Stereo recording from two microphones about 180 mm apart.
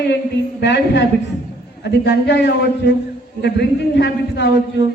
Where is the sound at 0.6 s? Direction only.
75° left (ahead or behind).